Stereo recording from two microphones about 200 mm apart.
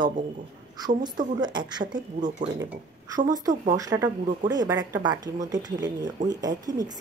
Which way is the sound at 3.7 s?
15° right (ahead or behind).